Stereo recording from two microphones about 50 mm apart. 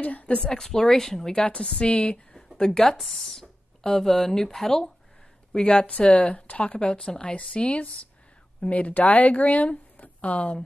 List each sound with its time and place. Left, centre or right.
0.0 s a woman's voice: left
0.4 s speech: centre
1.4 s speech: left
2.3 s a sound: centre
3.0 s speech: centre
5.5 s speech: left